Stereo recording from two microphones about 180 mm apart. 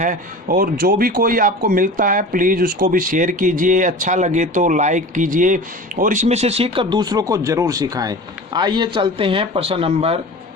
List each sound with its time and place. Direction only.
0.0 s speech: 50° right (ahead or behind); by 10.2 s 35° right (ahead or behind)